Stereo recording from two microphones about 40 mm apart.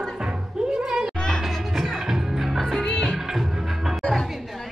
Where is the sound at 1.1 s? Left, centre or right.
Left.